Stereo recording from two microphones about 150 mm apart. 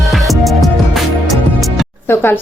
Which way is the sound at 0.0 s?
Centre (ahead or behind).